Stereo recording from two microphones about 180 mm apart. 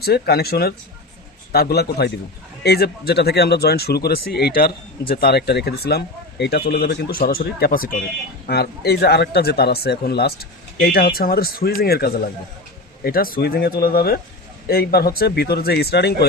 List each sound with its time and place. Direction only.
0.0 s speech: 60° left (ahead or behind)
8.4 s speech: 60° left (ahead or behind)